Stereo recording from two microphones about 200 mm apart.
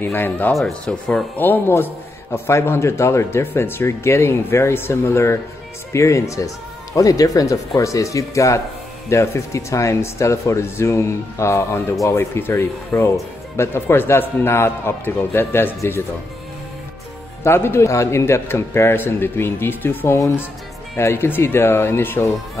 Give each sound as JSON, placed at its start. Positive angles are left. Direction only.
{"t": 0.0, "sound": "speech", "side_deg": 10}
{"t": 17.4, "sound": "speech", "side_deg": 10}